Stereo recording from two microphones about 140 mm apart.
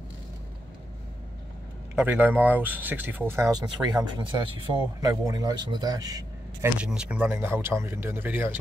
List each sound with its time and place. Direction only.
2.0 s speech: 10° right (ahead or behind)
6.8 s speech: 10° right (ahead or behind)